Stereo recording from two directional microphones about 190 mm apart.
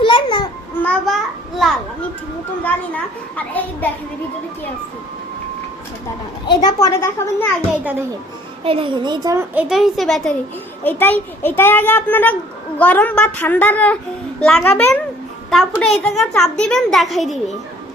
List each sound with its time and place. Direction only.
0.0 s babbling: 25° left (ahead or behind)
0.8 s a sound: 5° left (ahead or behind)
2.6 s a child's voice: 10° left (ahead or behind)
6.5 s a child's voice: 20° left (ahead or behind)
8.6 s a woman's voice: 30° right (ahead or behind); by 17.4 s centre (ahead or behind)